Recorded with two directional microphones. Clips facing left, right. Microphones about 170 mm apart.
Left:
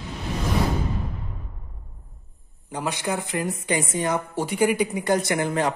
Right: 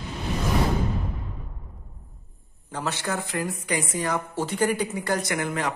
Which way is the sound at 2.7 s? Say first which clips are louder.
Left 2 dB; 15° left (ahead or behind).